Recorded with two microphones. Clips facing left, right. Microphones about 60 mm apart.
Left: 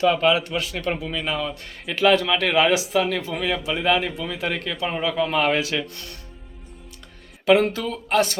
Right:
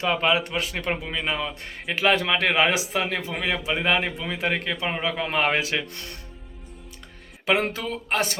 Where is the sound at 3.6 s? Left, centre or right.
Right.